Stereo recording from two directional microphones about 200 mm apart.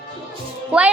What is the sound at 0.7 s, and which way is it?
Speech, 5° right (ahead or behind).